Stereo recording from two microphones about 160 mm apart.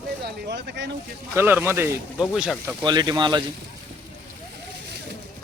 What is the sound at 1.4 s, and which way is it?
Speech, 15° right (ahead or behind).